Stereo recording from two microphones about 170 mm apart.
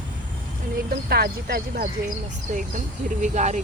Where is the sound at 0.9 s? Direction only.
65° right (ahead or behind).